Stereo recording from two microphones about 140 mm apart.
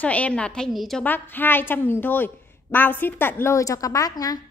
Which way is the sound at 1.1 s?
15° left (ahead or behind).